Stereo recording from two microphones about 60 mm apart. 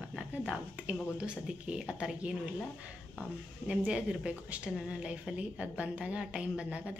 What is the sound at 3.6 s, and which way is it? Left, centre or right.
A woman's voice, centre.